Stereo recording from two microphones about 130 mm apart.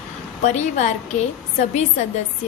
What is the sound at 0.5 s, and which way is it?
Speech, 60° left (ahead or behind).